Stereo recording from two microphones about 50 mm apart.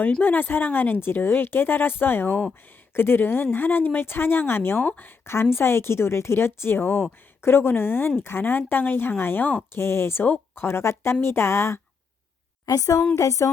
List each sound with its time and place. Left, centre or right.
0.2 s speech: left
5.2 s speech: left
9.7 s speech: left
13.1 s music: left